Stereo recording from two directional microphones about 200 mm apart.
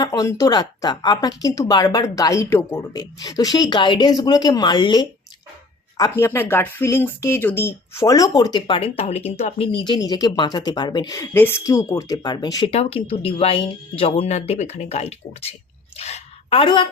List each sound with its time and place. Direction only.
0.0 s speech: 15° left (ahead or behind)
6.0 s speech: 10° left (ahead or behind)
12.7 s a woman's voice: 30° left (ahead or behind)